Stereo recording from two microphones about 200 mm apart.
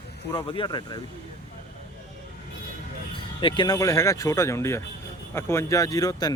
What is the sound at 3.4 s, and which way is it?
A man's voice, 25° left (ahead or behind).